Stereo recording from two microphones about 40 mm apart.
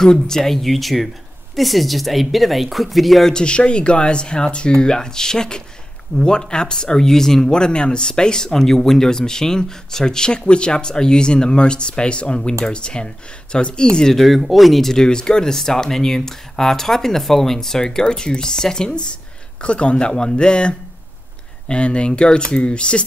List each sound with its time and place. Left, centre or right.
0.0 s speech: centre
0.4 s speech: centre
3.3 s speech: left
14.1 s speech: centre
15.0 s speech: left
19.6 s speech: left